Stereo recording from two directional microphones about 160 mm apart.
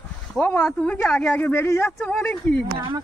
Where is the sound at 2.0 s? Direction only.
5° left (ahead or behind).